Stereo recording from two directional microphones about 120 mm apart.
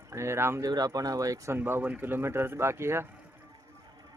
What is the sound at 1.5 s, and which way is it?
Speech, 15° right (ahead or behind).